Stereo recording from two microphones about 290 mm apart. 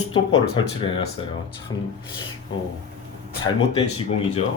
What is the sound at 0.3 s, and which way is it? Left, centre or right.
Speech, centre.